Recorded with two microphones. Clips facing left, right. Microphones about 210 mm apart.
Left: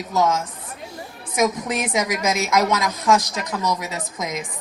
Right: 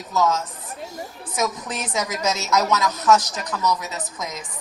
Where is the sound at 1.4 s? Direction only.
10° left (ahead or behind).